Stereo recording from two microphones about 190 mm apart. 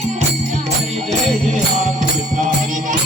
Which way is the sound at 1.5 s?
40° right (ahead or behind).